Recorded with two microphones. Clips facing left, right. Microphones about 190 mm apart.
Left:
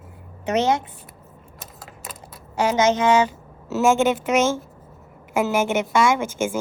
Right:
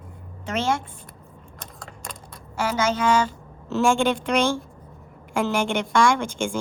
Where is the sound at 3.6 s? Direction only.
5° left (ahead or behind).